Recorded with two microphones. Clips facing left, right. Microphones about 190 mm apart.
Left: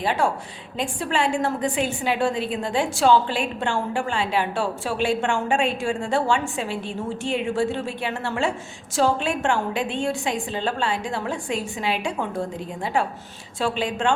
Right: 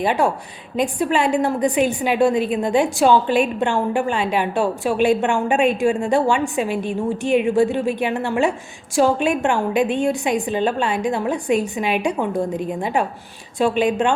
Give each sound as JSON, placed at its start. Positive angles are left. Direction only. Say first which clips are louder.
{"t": 0.0, "sound": "a woman's voice", "louder": "right 4 dB", "side_deg": -15}